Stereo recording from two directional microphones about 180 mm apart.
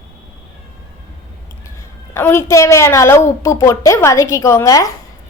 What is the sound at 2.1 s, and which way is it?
A woman's voice, 15° left (ahead or behind).